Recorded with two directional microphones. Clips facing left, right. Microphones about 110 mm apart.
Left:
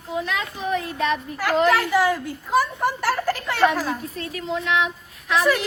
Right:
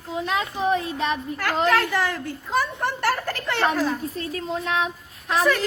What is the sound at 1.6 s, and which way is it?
A child's voice, 10° left (ahead or behind).